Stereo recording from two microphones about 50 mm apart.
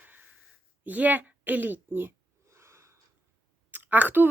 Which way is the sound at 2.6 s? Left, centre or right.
Right.